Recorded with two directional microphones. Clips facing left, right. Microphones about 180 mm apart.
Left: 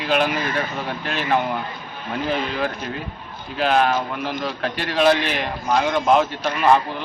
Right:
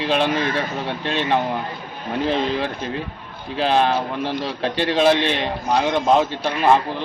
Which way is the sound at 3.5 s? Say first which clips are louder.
Even; 30° right (ahead or behind).